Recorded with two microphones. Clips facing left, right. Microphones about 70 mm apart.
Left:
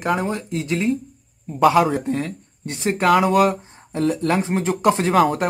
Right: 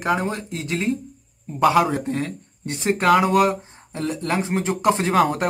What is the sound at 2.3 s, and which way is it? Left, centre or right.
Speech, right.